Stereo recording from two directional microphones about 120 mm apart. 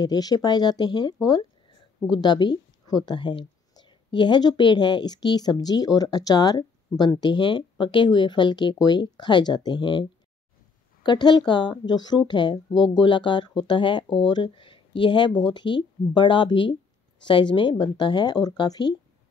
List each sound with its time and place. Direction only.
0.0 s speech: 35° left (ahead or behind)